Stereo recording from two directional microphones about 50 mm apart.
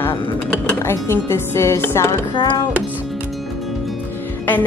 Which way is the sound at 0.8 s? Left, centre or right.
Left.